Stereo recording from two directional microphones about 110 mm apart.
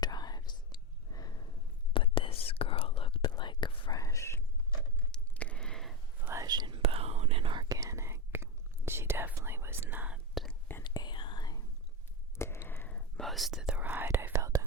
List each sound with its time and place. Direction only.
0.0 s whispering: 40° left (ahead or behind)
1.9 s whispering: 50° left (ahead or behind)
3.9 s whispering: 30° left (ahead or behind)
5.1 s a sound: 10° left (ahead or behind)
6.4 s whispering: 40° right (ahead or behind)
6.8 s whispering: 65° right (ahead or behind)
7.6 s whispering: 30° right (ahead or behind); by 10.2 s 15° right (ahead or behind)
10.8 s whispering: 40° left (ahead or behind)
12.4 s whispering: 25° left (ahead or behind); by 14.6 s 30° right (ahead or behind)